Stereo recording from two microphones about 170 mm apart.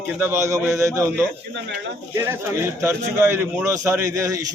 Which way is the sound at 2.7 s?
15° right (ahead or behind).